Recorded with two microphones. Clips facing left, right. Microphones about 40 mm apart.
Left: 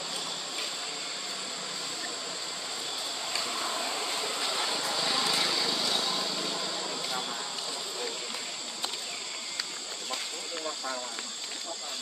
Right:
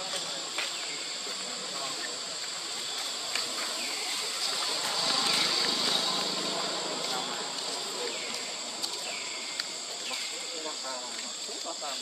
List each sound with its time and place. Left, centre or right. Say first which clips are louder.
4.2 s vehicle: left 3 dB; left; by 7.3 s centre